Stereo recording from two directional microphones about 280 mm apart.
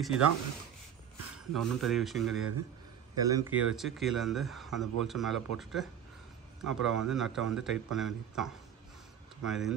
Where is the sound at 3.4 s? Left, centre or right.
Centre.